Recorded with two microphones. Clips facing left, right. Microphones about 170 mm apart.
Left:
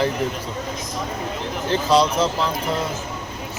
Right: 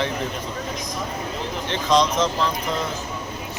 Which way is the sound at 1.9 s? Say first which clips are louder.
Left 1 dB; 5° left (ahead or behind).